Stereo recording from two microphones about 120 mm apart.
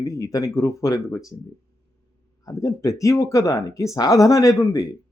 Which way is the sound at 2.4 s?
25° left (ahead or behind).